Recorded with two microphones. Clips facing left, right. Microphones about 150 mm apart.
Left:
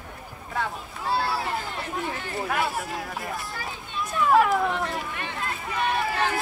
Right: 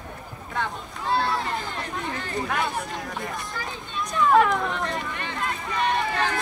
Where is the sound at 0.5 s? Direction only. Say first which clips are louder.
Even; 5° left (ahead or behind).